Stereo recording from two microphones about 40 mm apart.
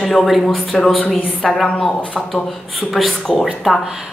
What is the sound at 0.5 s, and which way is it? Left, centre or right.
Speech, centre.